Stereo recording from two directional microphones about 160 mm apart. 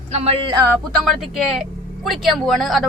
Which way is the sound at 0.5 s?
15° right (ahead or behind).